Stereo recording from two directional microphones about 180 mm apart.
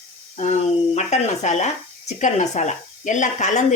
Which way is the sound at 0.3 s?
40° left (ahead or behind).